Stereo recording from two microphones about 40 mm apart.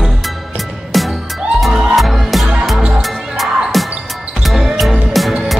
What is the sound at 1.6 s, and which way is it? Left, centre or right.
Music, centre.